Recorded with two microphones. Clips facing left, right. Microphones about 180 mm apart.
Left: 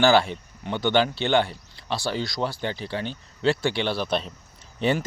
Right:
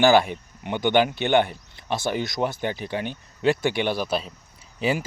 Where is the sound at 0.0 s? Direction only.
15° right (ahead or behind).